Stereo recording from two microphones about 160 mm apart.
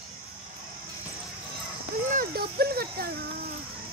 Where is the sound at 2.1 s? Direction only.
65° right (ahead or behind).